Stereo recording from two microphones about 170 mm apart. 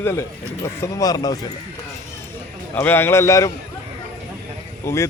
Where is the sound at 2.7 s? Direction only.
10° left (ahead or behind).